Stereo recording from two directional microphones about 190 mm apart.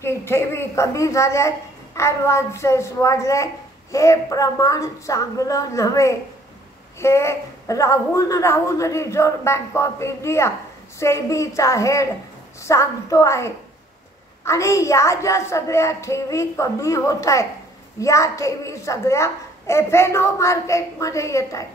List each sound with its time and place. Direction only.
0.0 s a child's voice: 15° left (ahead or behind)